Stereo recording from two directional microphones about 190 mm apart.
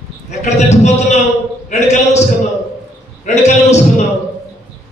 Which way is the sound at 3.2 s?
40° left (ahead or behind).